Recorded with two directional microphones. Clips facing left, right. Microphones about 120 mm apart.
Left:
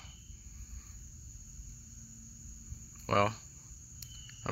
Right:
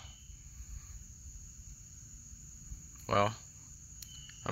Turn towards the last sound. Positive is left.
turn(degrees=-10)  # may be behind; listen again after turning